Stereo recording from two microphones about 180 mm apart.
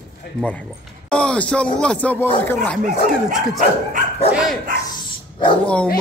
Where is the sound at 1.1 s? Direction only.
5° left (ahead or behind).